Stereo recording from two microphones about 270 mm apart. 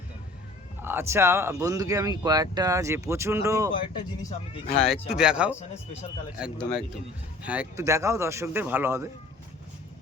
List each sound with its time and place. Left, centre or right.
0.8 s speech: centre
4.2 s speech: left
5.1 s speech: centre